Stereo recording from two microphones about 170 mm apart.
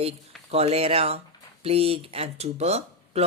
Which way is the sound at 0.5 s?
35° right (ahead or behind).